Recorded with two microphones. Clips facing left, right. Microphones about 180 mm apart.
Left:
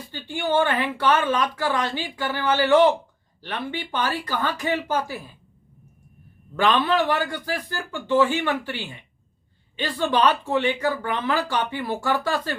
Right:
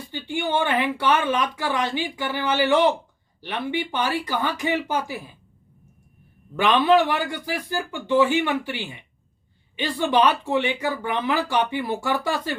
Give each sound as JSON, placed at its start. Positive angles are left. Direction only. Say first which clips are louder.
{"t": 0.1, "sound": "speech", "louder": "left 1 dB", "side_deg": -15}
{"t": 6.6, "sound": "speech", "louder": "right 3 dB", "side_deg": -15}